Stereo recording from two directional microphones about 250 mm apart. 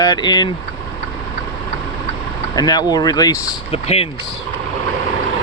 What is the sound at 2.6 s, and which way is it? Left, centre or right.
Speech, centre.